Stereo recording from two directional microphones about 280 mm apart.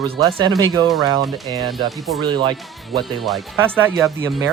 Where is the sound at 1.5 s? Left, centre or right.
Centre.